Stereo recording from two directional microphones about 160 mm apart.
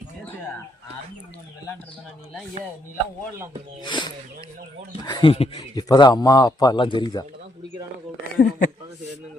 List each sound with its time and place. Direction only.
3.8 s speech: 30° left (ahead or behind)
8.4 s speech: 65° left (ahead or behind)